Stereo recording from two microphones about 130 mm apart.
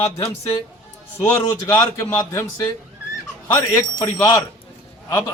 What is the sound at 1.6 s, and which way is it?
Speech, 30° left (ahead or behind).